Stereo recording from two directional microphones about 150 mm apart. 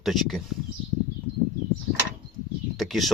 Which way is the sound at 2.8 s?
Centre (ahead or behind).